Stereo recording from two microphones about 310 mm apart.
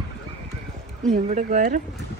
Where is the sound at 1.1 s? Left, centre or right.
Right.